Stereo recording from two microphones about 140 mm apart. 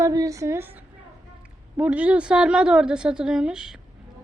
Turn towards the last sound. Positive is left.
turn(degrees=-5)  # may be behind; listen again after turning